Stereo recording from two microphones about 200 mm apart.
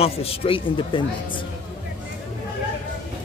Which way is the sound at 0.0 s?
30° left (ahead or behind).